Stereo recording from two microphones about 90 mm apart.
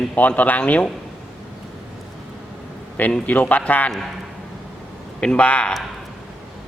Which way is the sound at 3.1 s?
15° left (ahead or behind).